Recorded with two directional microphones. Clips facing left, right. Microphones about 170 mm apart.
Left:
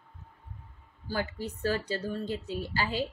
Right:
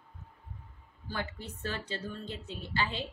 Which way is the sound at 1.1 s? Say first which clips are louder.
Left 5 dB; 35° left (ahead or behind).